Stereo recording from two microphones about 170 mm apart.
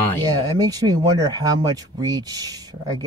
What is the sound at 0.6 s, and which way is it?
Speech, 20° right (ahead or behind).